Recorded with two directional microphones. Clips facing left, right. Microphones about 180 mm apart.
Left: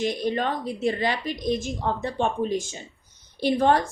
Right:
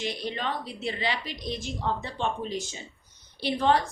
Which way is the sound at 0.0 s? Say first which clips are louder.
Left 7 dB; 50° left (ahead or behind).